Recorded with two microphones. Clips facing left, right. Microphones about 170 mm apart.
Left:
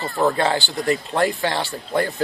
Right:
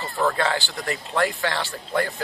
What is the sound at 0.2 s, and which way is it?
A man's voice, 20° left (ahead or behind).